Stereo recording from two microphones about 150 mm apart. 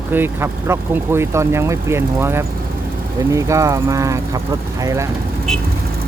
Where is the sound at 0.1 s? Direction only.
15° right (ahead or behind).